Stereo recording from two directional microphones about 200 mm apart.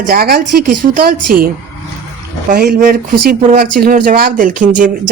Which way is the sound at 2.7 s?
45° right (ahead or behind).